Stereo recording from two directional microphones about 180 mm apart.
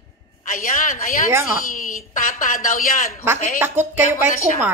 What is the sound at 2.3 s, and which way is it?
Speech, 50° left (ahead or behind).